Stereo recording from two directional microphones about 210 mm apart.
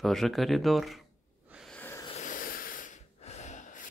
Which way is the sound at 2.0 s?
35° left (ahead or behind).